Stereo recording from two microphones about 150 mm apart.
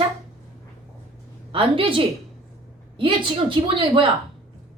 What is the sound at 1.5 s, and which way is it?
Speech, 35° right (ahead or behind).